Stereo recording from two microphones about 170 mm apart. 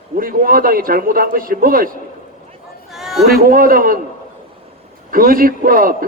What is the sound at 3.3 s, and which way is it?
Speech, 60° right (ahead or behind).